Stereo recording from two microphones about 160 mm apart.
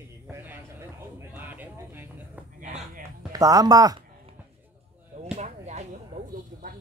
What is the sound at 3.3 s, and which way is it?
Speech, 20° right (ahead or behind).